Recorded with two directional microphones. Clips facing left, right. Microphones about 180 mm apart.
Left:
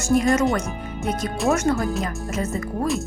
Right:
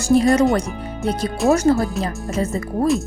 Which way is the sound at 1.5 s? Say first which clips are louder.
Right 6 dB; 35° right (ahead or behind).